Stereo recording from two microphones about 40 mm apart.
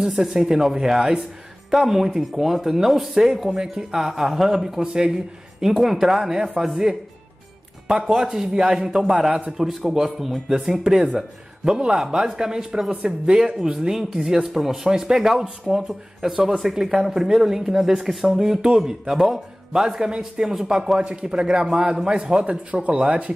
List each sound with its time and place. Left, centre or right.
0.1 s speech: centre
4.8 s speech: right
5.6 s speech: centre
12.9 s speech: right
13.7 s speech: centre
14.9 s speech: centre
15.1 s speech: centre
21.0 s speech: right